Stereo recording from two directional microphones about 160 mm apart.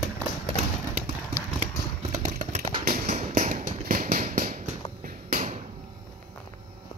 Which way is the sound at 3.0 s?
50° right (ahead or behind).